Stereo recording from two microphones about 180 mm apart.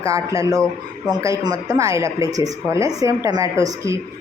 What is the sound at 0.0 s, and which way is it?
Speech, 15° right (ahead or behind).